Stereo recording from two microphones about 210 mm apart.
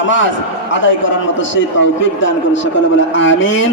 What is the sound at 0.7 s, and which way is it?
A man's voice, 60° left (ahead or behind).